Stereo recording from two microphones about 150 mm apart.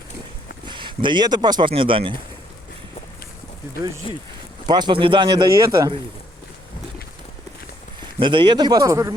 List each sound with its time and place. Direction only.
0.6 s speech: 30° right (ahead or behind)
4.1 s speech: 35° left (ahead or behind)
4.6 s speech: 30° right (ahead or behind)
8.2 s speech: 35° right (ahead or behind)